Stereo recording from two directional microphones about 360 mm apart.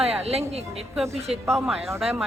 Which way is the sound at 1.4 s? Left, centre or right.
Centre.